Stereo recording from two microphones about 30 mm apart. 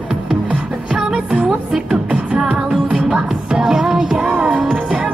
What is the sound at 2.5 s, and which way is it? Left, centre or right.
Music, right.